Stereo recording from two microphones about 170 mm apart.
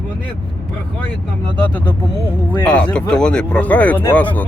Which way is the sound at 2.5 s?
10° left (ahead or behind).